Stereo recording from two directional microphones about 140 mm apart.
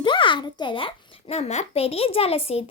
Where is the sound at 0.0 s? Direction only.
35° left (ahead or behind).